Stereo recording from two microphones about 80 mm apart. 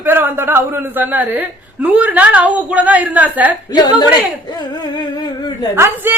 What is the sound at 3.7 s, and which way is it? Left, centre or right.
Speech, left.